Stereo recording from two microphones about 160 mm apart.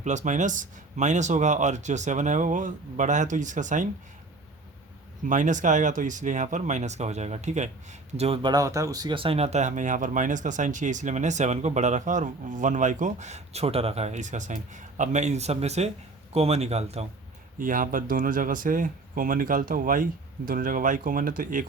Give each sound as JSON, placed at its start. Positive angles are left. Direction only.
{"t": 0.0, "sound": "speech", "side_deg": -50}
{"t": 5.2, "sound": "speech", "side_deg": -50}
{"t": 17.6, "sound": "speech", "side_deg": -60}